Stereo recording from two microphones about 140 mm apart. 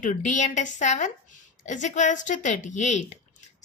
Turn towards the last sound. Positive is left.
turn(degrees=55)  # may be behind; listen again after turning